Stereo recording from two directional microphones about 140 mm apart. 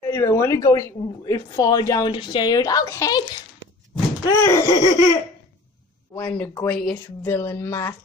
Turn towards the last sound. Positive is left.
turn(degrees=15)  # may be behind; listen again after turning